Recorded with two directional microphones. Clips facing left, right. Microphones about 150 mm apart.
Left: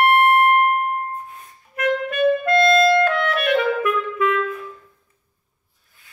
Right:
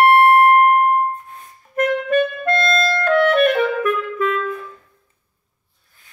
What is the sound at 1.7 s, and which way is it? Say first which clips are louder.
Clarinet: right 5 dB; 45° right (ahead or behind).